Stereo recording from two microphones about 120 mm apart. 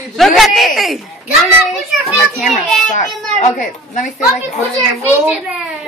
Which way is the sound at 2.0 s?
Centre (ahead or behind).